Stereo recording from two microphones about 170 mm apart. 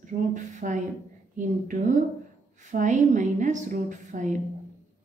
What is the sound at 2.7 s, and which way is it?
A woman's voice, 45° right (ahead or behind).